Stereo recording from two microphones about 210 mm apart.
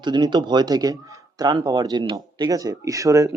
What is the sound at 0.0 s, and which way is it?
Speech, 20° right (ahead or behind).